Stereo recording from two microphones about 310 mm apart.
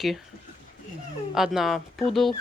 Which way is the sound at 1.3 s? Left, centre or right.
Centre.